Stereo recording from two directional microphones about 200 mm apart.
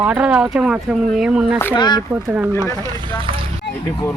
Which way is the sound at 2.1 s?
10° right (ahead or behind).